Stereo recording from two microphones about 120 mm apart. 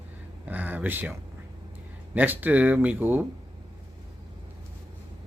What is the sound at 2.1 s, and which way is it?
Speech, 15° right (ahead or behind).